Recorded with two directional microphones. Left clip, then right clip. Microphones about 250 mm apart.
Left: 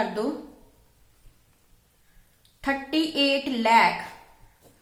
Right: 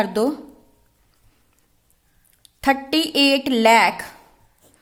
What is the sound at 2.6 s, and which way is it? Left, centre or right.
A woman's voice, right.